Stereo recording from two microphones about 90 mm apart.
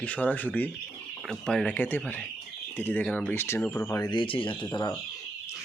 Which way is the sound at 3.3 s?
30° left (ahead or behind).